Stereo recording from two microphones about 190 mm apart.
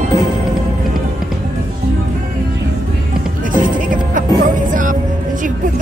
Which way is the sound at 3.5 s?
45° right (ahead or behind).